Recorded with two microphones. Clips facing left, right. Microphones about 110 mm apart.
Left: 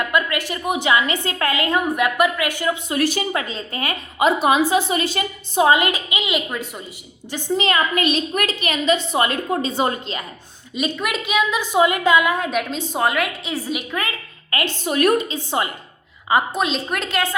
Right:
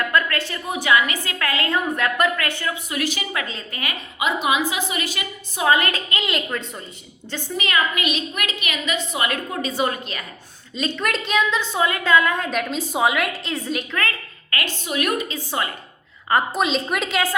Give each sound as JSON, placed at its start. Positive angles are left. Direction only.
{"t": 0.0, "sound": "a woman's voice", "side_deg": 15}
{"t": 1.5, "sound": "a woman's voice", "side_deg": 15}
{"t": 2.9, "sound": "a woman's voice", "side_deg": 35}
{"t": 7.5, "sound": "a woman's voice", "side_deg": 30}
{"t": 10.8, "sound": "a woman's voice", "side_deg": 10}
{"t": 14.5, "sound": "a woman's voice", "side_deg": 20}
{"t": 14.8, "sound": "a woman's voice", "side_deg": 40}
{"t": 15.3, "sound": "a woman's voice", "side_deg": 20}
{"t": 16.3, "sound": "a woman's voice", "side_deg": 0}